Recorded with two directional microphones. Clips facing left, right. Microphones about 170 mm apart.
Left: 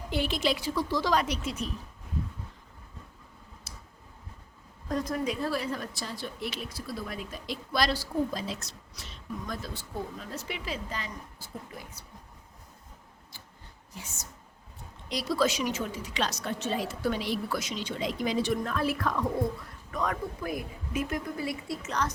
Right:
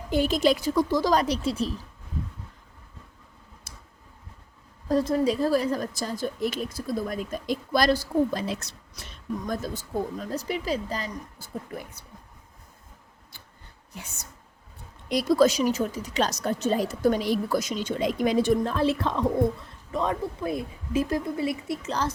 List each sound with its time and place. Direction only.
0.1 s a woman's voice: 45° right (ahead or behind)
3.7 s tick-tock: 50° right (ahead or behind)
4.9 s a woman's voice: 30° right (ahead or behind); by 12.0 s 55° right (ahead or behind)
13.9 s speech: 60° right (ahead or behind)
15.1 s a woman's voice: 50° right (ahead or behind)
18.6 s speech: 30° right (ahead or behind)